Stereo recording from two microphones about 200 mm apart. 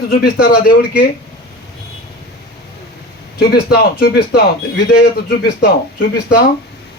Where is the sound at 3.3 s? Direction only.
50° left (ahead or behind).